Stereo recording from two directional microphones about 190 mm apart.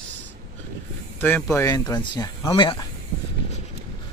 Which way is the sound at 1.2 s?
10° left (ahead or behind).